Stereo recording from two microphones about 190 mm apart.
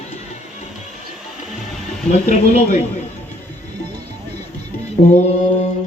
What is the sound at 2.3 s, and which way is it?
Speech, 35° left (ahead or behind).